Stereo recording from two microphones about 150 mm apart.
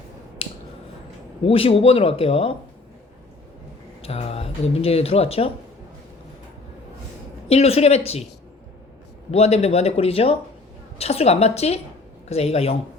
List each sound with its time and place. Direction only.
1.5 s speech: 40° left (ahead or behind)
4.0 s speech: 45° left (ahead or behind)
7.4 s speech: 45° left (ahead or behind)
9.3 s speech: 45° left (ahead or behind)